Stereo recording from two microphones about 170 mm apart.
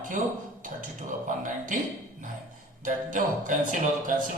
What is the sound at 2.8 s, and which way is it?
Speech, 50° right (ahead or behind).